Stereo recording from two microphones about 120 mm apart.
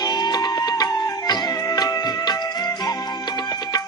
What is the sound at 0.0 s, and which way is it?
Music, 35° left (ahead or behind).